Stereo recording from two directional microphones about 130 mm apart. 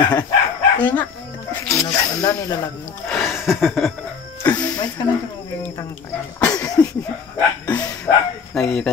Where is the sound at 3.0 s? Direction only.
Centre (ahead or behind).